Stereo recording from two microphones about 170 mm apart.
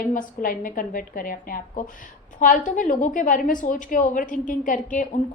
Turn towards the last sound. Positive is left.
turn(degrees=50)  # may be behind; listen again after turning